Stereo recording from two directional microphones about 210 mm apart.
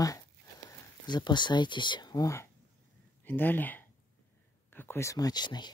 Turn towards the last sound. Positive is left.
turn(degrees=20)  # may be behind; listen again after turning